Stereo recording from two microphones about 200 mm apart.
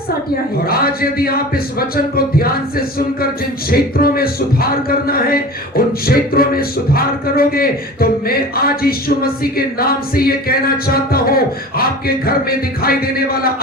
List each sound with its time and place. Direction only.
0.7 s speech: 50° left (ahead or behind)